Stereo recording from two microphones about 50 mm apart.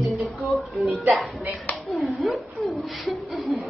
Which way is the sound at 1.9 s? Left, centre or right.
Centre.